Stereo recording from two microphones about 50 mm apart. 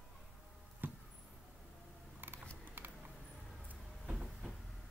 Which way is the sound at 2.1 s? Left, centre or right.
Right.